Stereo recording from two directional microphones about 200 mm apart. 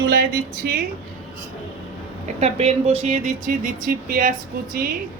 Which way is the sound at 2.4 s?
30° right (ahead or behind).